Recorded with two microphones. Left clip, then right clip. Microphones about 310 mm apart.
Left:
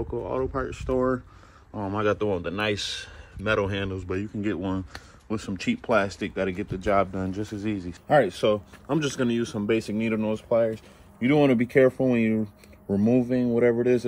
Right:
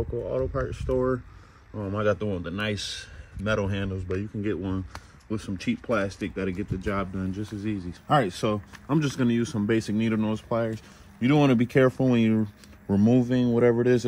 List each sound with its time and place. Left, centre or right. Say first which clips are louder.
0.6 s a man's voice: even; centre
0.9 s speech: left 1 dB; left
1.9 s a man's voice: left 1 dB; centre
8.1 s speech: left 3 dB; centre